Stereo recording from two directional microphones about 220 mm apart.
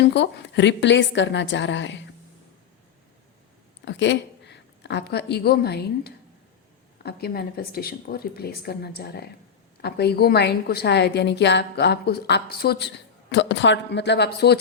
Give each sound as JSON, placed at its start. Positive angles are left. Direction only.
{"t": 0.0, "sound": "a woman's voice", "side_deg": 50}
{"t": 3.8, "sound": "a woman's voice", "side_deg": 55}